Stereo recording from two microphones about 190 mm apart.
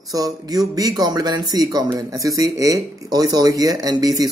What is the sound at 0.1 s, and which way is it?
Speech, 20° right (ahead or behind).